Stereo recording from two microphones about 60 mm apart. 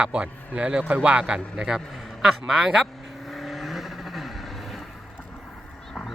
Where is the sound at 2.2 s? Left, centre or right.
Centre.